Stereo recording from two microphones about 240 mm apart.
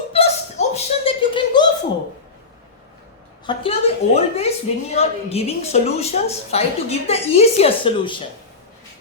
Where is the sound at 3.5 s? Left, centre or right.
Left.